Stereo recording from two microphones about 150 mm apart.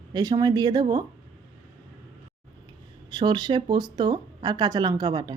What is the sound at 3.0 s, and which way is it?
Speech, 30° right (ahead or behind).